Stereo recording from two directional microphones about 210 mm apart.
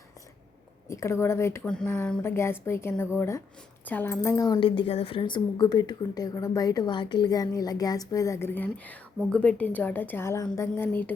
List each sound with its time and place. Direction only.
0.9 s a woman's voice: 15° left (ahead or behind)